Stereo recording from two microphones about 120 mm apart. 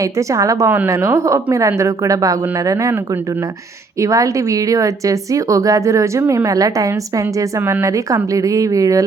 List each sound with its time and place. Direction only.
0.0 s a woman's voice: 25° right (ahead or behind)
4.0 s a woman's voice: 25° right (ahead or behind)